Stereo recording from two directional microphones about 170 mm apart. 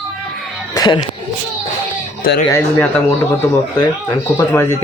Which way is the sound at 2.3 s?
70° left (ahead or behind).